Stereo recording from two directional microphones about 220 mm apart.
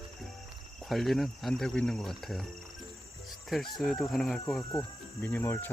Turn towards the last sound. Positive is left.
turn(degrees=10)  # may be behind; listen again after turning